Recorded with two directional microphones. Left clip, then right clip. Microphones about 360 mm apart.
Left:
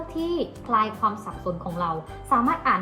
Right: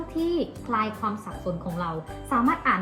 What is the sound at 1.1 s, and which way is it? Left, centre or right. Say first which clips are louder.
Speech: left 2 dB; centre.